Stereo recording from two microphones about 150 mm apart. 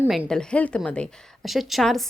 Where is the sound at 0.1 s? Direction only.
Centre (ahead or behind).